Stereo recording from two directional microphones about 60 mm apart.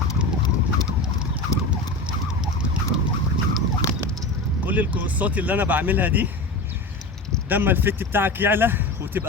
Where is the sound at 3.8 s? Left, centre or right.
Left.